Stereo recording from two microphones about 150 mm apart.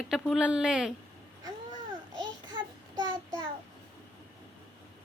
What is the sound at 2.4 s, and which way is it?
Child singing, 30° right (ahead or behind).